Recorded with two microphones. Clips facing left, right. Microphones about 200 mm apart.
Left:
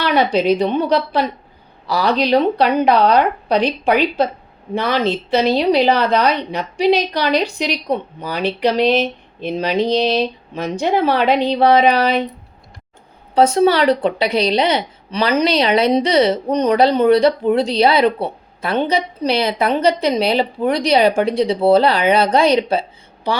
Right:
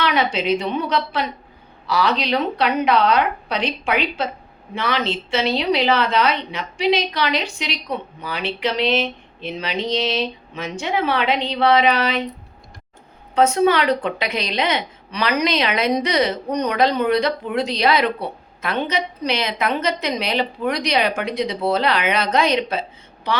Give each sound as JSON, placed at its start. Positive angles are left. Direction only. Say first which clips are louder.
{"t": 0.0, "sound": "a woman's voice", "louder": "left 5 dB", "side_deg": 35}
{"t": 13.3, "sound": "a woman's voice", "louder": "left 3 dB", "side_deg": 35}